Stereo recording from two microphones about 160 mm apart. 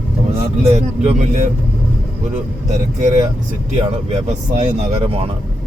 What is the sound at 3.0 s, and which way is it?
Speech, 50° right (ahead or behind).